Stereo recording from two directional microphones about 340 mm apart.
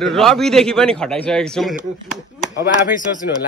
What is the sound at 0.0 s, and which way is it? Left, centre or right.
Speech, centre.